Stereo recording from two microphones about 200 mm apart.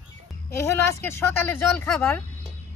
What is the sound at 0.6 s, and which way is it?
Speech, 10° left (ahead or behind).